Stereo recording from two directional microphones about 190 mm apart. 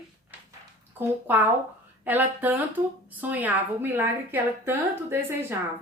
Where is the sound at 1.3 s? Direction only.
10° right (ahead or behind).